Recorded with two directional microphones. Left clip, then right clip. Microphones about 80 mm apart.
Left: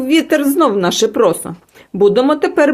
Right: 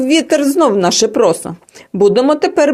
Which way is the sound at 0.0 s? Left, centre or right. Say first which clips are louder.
Right 1 dB; right.